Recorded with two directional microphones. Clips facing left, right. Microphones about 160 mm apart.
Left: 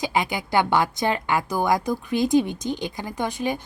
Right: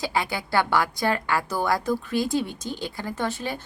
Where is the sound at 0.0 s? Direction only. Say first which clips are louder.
Left 2 dB; 20° left (ahead or behind).